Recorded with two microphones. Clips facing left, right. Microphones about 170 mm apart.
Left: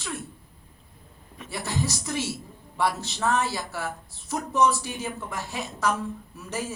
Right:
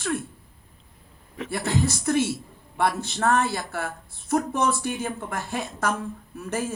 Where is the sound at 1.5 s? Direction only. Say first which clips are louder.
Right 4 dB; 55° right (ahead or behind).